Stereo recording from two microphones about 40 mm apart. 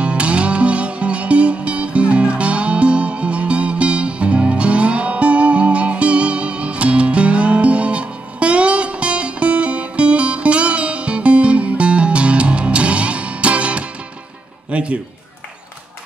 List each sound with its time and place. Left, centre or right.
0.0 s music: right